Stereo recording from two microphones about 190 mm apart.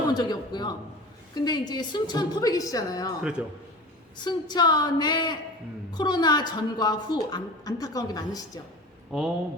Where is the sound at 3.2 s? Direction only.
5° right (ahead or behind).